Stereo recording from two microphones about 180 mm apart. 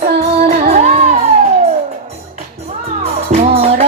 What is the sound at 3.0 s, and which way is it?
Music, 35° right (ahead or behind).